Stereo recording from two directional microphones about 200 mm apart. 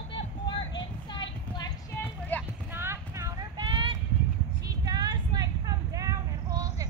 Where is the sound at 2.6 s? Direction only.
10° right (ahead or behind).